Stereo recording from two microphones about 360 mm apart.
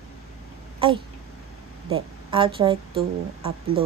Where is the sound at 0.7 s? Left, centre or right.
Centre.